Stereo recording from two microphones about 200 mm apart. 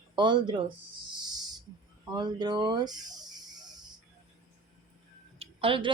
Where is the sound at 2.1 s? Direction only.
20° right (ahead or behind).